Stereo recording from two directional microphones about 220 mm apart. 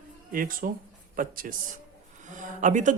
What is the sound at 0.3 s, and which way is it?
Speech, 40° right (ahead or behind).